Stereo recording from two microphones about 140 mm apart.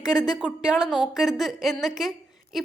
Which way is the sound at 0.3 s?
5° right (ahead or behind).